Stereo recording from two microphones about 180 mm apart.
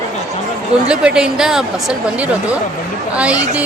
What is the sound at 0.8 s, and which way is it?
A woman's voice, 5° right (ahead or behind).